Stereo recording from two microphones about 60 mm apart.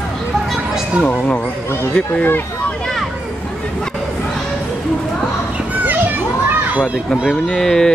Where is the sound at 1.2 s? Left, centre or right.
Centre.